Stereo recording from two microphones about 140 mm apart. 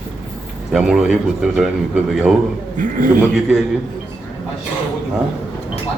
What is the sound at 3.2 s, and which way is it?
Speech, 5° right (ahead or behind).